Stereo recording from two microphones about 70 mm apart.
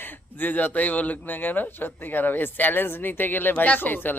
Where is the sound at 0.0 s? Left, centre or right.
Left.